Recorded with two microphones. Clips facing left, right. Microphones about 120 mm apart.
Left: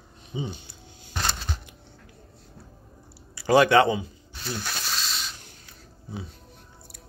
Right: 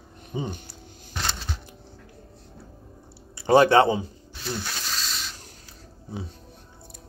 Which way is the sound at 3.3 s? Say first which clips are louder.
Right 1 dB; 30° right (ahead or behind).